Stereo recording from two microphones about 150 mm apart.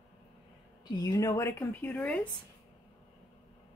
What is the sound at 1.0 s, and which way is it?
Speech, 25° left (ahead or behind).